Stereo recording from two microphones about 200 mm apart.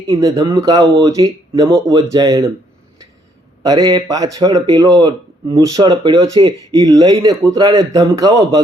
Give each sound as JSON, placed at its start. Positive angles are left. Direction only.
{"t": 0.1, "sound": "speech", "side_deg": -20}
{"t": 3.6, "sound": "speech", "side_deg": -20}